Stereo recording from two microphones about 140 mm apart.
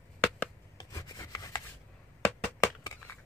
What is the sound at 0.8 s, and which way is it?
Rub, 25° left (ahead or behind).